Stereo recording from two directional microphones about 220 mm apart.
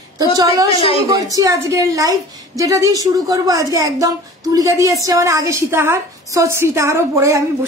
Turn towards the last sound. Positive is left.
turn(degrees=-15)  # may be behind; listen again after turning